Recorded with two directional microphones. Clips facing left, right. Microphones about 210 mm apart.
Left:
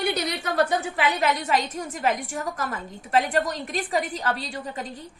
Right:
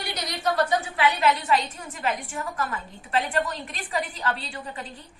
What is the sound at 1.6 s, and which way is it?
A woman's voice, 40° left (ahead or behind).